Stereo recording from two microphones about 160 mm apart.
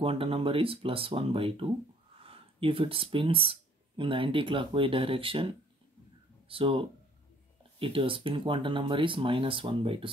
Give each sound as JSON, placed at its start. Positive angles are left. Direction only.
{"t": 0.0, "sound": "speech", "side_deg": -35}
{"t": 6.5, "sound": "speech", "side_deg": -35}